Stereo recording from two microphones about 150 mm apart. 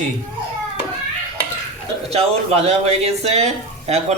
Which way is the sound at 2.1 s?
40° right (ahead or behind).